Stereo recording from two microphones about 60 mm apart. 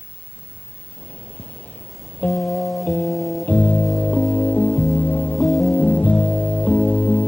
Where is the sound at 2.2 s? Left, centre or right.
Left.